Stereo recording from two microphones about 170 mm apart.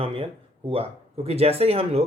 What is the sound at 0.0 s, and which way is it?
Speech, 30° right (ahead or behind).